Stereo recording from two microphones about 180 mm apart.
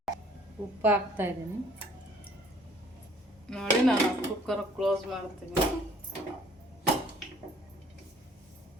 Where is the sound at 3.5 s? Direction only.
5° left (ahead or behind).